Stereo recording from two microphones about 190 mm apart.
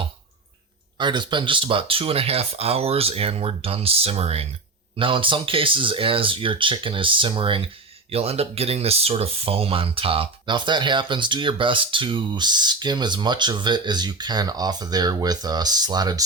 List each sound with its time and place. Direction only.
0.9 s speech: 25° right (ahead or behind)